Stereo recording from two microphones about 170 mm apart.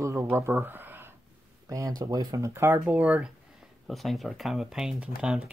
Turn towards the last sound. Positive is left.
turn(degrees=-5)  # may be behind; listen again after turning